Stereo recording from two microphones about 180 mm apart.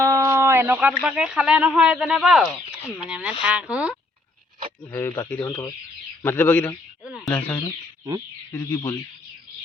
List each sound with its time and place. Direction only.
0.0 s speech: 15° right (ahead or behind)
4.8 s speech: 15° left (ahead or behind)
7.0 s speech: 5° right (ahead or behind)
7.3 s speech: 10° left (ahead or behind)